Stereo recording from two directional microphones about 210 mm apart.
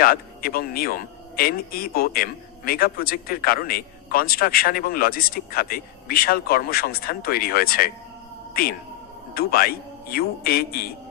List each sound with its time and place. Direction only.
0.0 s speech: 45° left (ahead or behind)
9.3 s speech: 45° left (ahead or behind)